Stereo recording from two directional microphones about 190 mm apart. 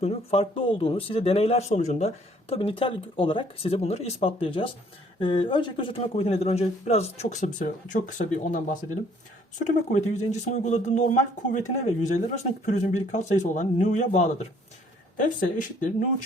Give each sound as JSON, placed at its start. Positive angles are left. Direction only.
{"t": 0.0, "sound": "speech", "side_deg": 30}